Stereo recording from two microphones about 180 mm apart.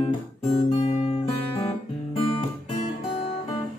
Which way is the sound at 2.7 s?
35° left (ahead or behind).